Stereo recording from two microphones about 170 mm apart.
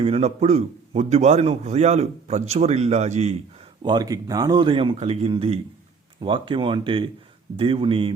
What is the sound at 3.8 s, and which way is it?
Speech, 25° right (ahead or behind).